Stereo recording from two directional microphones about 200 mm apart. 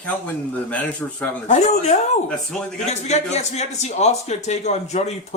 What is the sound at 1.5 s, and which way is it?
A man's voice, 35° left (ahead or behind).